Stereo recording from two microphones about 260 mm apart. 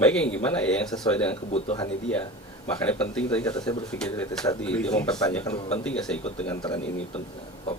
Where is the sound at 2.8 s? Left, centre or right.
Centre.